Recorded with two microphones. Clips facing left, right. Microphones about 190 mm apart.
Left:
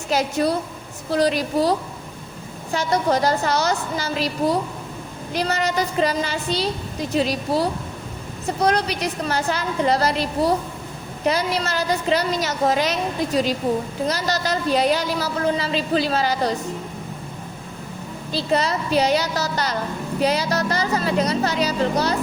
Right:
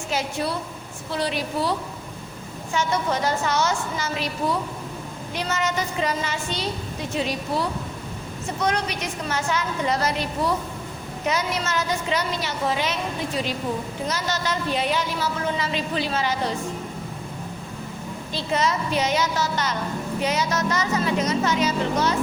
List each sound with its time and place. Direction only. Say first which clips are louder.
0.1 s speech: left 6 dB; 40° left (ahead or behind)
2.7 s speech: left 4 dB; 35° left (ahead or behind)
18.3 s speech: left 3 dB; 35° left (ahead or behind)